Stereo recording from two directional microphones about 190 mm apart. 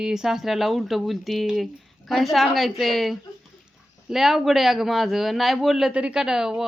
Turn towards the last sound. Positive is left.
turn(degrees=-5)  # may be behind; listen again after turning